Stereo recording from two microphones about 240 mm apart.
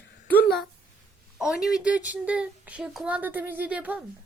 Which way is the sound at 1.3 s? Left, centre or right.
Centre.